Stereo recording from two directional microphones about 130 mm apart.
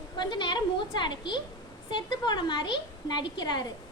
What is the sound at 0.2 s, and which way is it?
A woman's voice, 35° left (ahead or behind).